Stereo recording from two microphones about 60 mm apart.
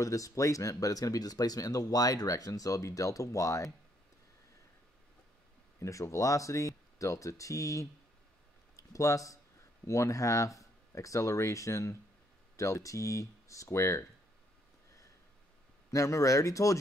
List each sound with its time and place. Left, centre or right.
0.0 s speech: left
5.8 s speech: left
15.9 s speech: left